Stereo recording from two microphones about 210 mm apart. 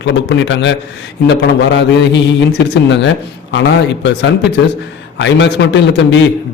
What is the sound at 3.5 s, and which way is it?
A man's voice, 55° left (ahead or behind).